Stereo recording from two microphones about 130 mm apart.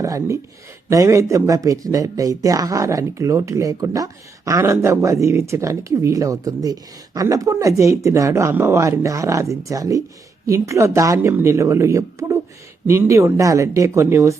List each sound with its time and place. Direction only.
0.0 s speech: 25° right (ahead or behind)